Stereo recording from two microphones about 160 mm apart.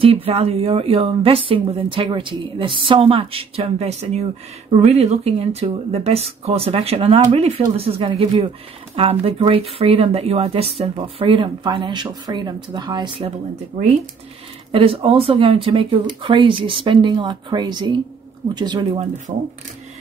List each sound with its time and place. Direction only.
0.0 s speech: 35° right (ahead or behind)
14.7 s speech: 35° right (ahead or behind)
19.3 s speech: 45° right (ahead or behind)